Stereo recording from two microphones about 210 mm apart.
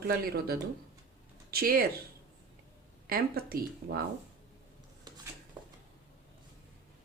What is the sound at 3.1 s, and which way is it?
Speech, 45° right (ahead or behind).